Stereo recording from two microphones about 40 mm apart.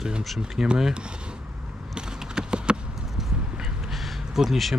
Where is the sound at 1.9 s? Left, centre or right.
Centre.